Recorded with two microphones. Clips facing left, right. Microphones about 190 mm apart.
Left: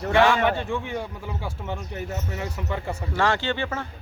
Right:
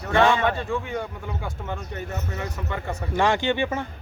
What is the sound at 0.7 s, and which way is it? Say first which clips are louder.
Speech: right 1 dB; 5° left (ahead or behind).